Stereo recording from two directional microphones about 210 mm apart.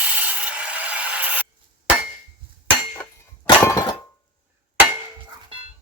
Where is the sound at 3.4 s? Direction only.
15° left (ahead or behind).